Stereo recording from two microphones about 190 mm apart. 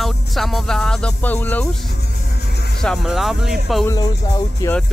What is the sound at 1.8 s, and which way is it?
Music, 55° left (ahead or behind).